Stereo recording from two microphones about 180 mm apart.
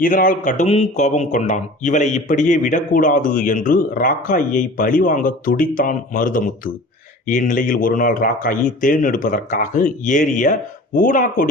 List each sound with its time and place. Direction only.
0.0 s speech: 50° left (ahead or behind)